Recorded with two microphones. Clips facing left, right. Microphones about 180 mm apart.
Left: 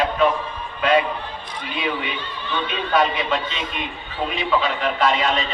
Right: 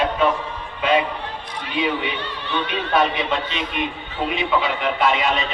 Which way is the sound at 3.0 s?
20° right (ahead or behind).